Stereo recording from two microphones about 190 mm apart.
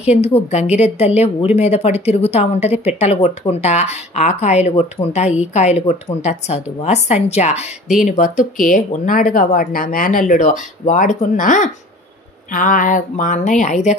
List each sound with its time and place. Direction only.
0.5 s speech: 35° left (ahead or behind)